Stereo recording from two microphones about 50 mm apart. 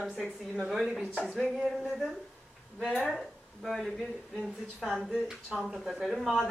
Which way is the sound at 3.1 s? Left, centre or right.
Centre.